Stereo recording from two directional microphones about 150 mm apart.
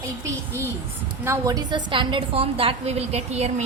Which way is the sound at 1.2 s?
20° right (ahead or behind).